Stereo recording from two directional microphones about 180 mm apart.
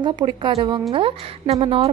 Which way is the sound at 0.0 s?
20° right (ahead or behind).